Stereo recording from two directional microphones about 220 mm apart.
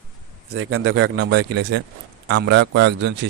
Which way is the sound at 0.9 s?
65° right (ahead or behind).